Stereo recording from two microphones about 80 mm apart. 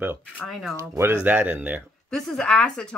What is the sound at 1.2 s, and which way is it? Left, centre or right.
Speech, right.